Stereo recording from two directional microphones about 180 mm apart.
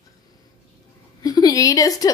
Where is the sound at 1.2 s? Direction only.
20° left (ahead or behind).